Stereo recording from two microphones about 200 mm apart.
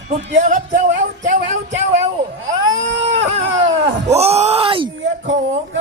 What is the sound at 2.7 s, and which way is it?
Vehicle, 70° right (ahead or behind).